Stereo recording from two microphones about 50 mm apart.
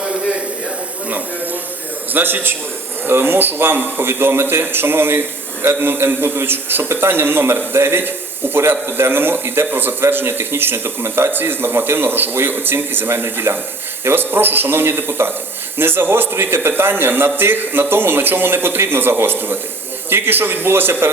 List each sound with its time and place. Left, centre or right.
2.1 s a man's voice: right
11.3 s a man's voice: right